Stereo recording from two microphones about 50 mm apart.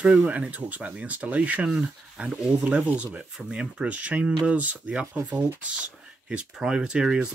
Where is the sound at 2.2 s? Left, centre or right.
Right.